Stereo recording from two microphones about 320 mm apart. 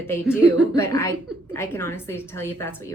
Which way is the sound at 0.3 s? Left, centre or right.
Centre.